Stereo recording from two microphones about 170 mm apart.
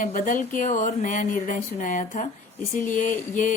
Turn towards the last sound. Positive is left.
turn(degrees=50)  # may be behind; listen again after turning